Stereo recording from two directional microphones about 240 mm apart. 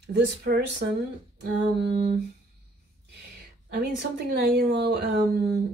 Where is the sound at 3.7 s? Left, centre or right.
Right.